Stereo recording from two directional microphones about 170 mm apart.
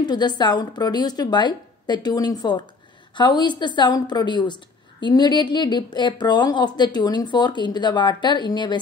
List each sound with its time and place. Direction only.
0.0 s a woman's voice: 25° left (ahead or behind)